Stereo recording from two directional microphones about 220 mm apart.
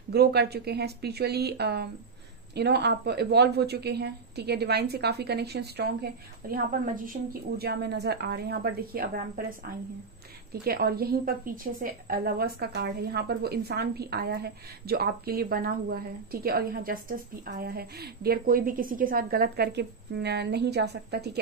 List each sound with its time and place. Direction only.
0.1 s a woman's voice: 45° right (ahead or behind)
10.5 s a woman's voice: 45° right (ahead or behind)